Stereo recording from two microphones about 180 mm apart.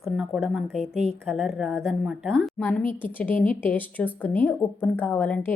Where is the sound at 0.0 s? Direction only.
5° right (ahead or behind).